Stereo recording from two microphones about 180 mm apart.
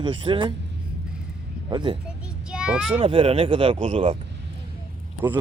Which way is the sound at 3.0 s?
30° right (ahead or behind).